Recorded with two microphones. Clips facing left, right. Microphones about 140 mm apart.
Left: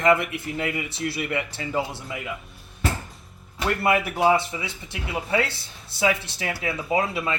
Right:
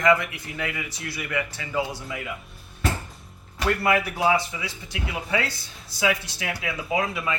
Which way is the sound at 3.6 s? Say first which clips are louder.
Even; 25° left (ahead or behind).